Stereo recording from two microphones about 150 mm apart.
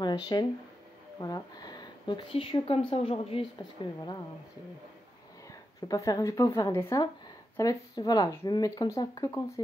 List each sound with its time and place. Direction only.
0.0 s a woman's voice: 30° left (ahead or behind)
3.5 s speech: 25° left (ahead or behind)
5.9 s speech: 25° left (ahead or behind)